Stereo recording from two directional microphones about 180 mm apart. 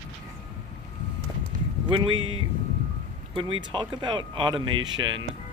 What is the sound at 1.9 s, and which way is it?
Speech, 30° right (ahead or behind).